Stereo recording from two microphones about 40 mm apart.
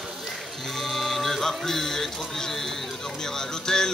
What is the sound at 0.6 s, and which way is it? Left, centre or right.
Speech, centre.